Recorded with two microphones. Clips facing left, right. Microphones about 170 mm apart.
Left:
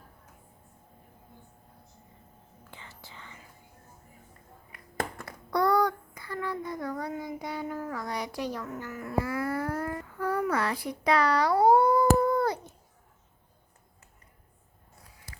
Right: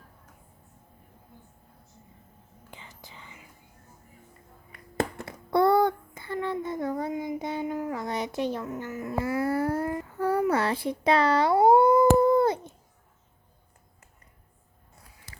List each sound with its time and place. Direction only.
2.6 s whispering: 15° right (ahead or behind)
4.9 s child singing: 25° right (ahead or behind)